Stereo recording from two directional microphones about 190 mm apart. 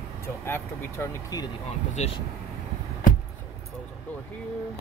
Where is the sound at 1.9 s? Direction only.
35° left (ahead or behind).